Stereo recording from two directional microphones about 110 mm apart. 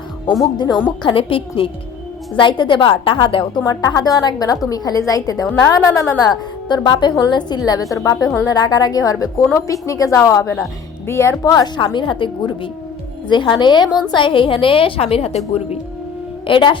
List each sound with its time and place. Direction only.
0.7 s a woman's voice: 10° right (ahead or behind)
1.0 s a woman's voice: 55° left (ahead or behind); by 11.7 s 30° left (ahead or behind)
11.8 s a woman's voice: 50° left (ahead or behind); by 15.8 s 70° left (ahead or behind)
16.5 s a woman's voice: 50° left (ahead or behind)